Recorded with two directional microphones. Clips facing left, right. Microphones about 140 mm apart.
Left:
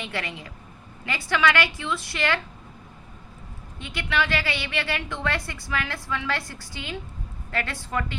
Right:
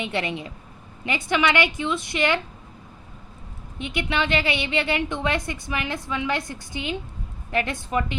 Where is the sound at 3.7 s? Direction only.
20° right (ahead or behind).